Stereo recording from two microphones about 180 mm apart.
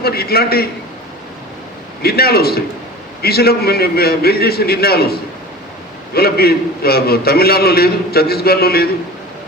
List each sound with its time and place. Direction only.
0.0 s a man's voice: 60° left (ahead or behind)
2.0 s a man's voice: 60° left (ahead or behind)
6.1 s a man's voice: 60° left (ahead or behind)